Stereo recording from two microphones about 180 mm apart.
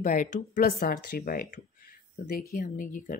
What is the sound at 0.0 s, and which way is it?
Speech, 45° left (ahead or behind).